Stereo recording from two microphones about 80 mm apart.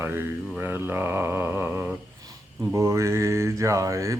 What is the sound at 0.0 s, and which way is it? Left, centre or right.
Mantra, right.